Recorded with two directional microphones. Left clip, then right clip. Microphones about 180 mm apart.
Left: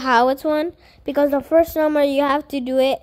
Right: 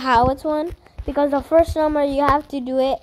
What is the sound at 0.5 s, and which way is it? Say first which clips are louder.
Speech: left 2 dB; 25° left (ahead or behind).